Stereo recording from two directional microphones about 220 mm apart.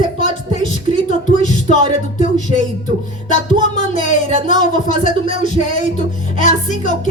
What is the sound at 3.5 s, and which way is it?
Music, 35° left (ahead or behind).